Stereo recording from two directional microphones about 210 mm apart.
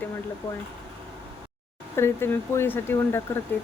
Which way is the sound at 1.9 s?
10° left (ahead or behind).